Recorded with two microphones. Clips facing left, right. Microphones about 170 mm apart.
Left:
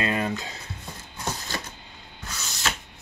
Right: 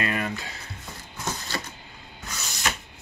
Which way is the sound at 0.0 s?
25° left (ahead or behind).